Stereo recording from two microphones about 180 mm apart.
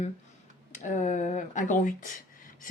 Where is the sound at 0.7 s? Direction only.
45° left (ahead or behind).